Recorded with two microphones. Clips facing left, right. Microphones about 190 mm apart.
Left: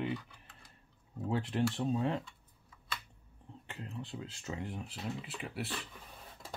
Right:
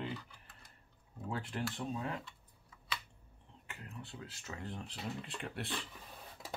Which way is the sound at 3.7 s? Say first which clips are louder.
Left 6 dB; 25° left (ahead or behind).